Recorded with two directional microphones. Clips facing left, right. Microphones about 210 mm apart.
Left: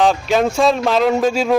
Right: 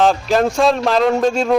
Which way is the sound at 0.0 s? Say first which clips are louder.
Even; centre (ahead or behind).